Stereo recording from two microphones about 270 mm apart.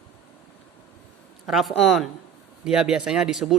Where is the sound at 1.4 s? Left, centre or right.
Centre.